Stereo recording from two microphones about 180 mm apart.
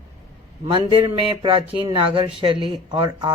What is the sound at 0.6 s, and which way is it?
Speech, 30° right (ahead or behind).